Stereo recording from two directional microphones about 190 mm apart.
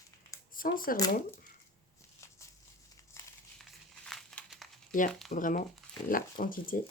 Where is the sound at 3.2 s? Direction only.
15° left (ahead or behind).